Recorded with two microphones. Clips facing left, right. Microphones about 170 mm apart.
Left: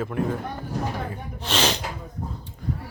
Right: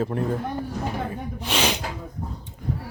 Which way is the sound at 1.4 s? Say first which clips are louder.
Left 1 dB; 10° right (ahead or behind).